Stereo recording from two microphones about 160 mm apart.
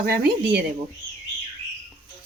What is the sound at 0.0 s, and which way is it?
Speech, 75° right (ahead or behind).